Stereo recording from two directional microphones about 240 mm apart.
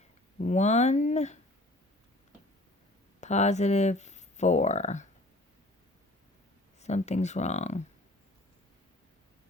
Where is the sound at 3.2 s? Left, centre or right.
Left.